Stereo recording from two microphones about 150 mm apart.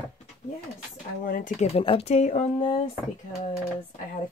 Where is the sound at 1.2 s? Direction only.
65° left (ahead or behind).